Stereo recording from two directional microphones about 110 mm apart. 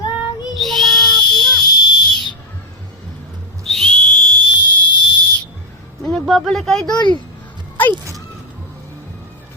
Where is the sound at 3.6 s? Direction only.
5° left (ahead or behind).